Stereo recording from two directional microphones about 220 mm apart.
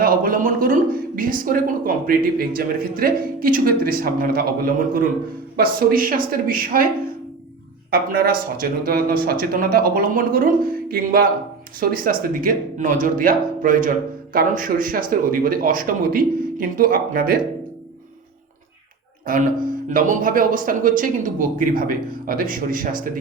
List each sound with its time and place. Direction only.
0.0 s speech: 40° right (ahead or behind)
7.9 s speech: 40° right (ahead or behind)
19.2 s speech: 35° right (ahead or behind)